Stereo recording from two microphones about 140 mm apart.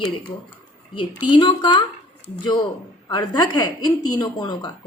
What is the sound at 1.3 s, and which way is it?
A woman's voice, 35° left (ahead or behind).